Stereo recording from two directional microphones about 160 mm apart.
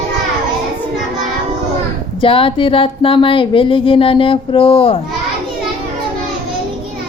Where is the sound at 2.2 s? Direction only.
35° left (ahead or behind).